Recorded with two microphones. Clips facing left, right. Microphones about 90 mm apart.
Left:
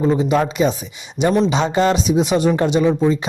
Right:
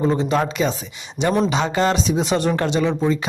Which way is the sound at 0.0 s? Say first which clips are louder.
Left 3 dB; 10° left (ahead or behind).